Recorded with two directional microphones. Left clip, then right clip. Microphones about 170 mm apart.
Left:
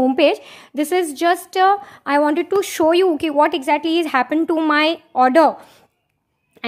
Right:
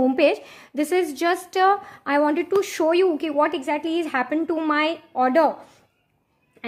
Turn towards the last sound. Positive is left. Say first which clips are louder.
# left 6 dB
turn(degrees=35)  # may be behind; listen again after turning